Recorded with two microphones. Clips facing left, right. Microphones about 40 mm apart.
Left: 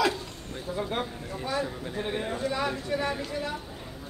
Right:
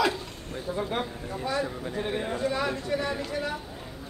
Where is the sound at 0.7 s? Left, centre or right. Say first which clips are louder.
Even; centre.